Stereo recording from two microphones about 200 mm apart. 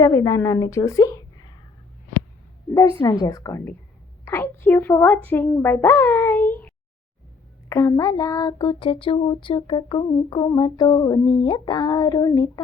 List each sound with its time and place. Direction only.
0.0 s a woman's voice: 15° left (ahead or behind)
3.0 s a woman's voice: 20° left (ahead or behind)
7.7 s a sound: 20° left (ahead or behind)